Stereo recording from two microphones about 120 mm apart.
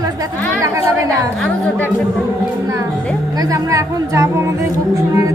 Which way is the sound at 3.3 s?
30° right (ahead or behind).